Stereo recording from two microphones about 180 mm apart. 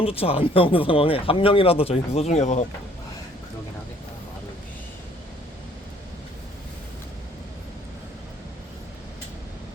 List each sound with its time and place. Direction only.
0.0 s speech: 30° left (ahead or behind)